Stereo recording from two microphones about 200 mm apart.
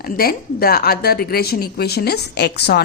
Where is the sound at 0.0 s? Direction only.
50° left (ahead or behind).